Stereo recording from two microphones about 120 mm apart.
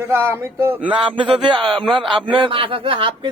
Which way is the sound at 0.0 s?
20° right (ahead or behind).